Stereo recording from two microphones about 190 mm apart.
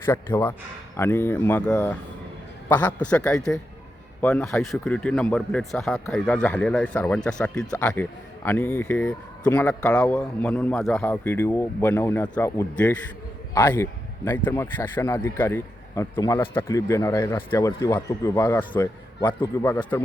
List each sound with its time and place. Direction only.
0.0 s a man's voice: 15° left (ahead or behind)